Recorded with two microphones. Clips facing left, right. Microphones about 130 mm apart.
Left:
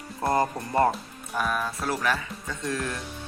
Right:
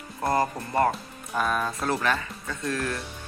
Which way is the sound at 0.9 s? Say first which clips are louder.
Right 1 dB; 5° left (ahead or behind).